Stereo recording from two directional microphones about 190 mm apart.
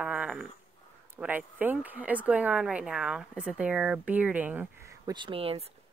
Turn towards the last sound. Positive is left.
turn(degrees=-30)  # may be behind; listen again after turning